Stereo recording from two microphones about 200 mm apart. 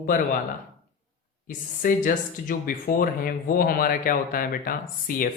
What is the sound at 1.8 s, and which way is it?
Speech, 45° left (ahead or behind).